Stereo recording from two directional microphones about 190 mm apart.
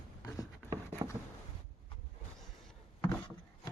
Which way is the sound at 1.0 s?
20° right (ahead or behind).